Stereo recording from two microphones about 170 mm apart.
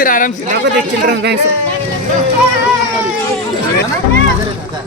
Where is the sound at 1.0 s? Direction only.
75° right (ahead or behind).